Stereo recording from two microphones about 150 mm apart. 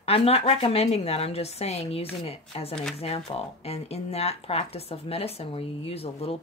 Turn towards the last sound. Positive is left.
turn(degrees=40)  # may be behind; listen again after turning